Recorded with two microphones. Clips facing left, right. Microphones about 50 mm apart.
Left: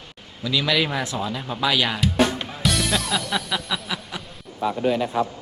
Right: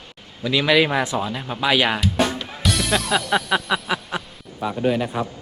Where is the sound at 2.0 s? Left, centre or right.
Centre.